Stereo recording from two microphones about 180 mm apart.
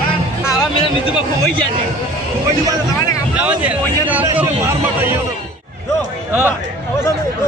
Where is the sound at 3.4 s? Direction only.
10° right (ahead or behind).